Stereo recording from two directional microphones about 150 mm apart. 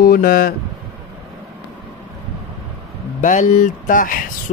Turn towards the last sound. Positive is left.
turn(degrees=65)  # may be behind; listen again after turning